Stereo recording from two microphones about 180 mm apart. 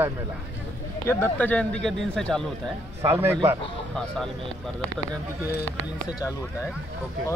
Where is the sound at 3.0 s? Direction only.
15° right (ahead or behind).